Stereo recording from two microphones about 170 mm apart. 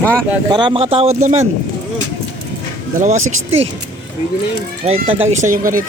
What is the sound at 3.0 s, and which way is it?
Speech, 40° right (ahead or behind).